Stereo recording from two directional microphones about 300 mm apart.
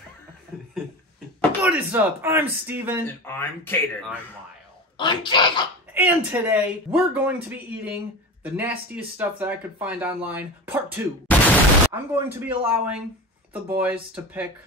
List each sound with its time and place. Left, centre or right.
0.5 s speech: centre
3.3 s speech: centre
4.9 s speech: centre
5.9 s speech: centre
11.3 s a sound: centre
11.9 s speech: centre